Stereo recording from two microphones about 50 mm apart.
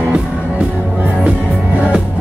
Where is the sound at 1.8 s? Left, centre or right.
Right.